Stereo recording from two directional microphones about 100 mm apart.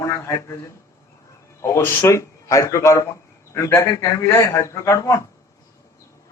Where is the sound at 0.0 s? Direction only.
30° left (ahead or behind).